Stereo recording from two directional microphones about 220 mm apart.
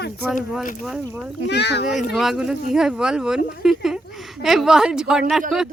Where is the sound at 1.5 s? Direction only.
50° left (ahead or behind).